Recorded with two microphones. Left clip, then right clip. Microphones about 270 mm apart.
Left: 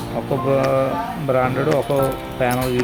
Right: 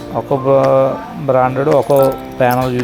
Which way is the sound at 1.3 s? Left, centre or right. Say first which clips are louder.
Right 7 dB; centre.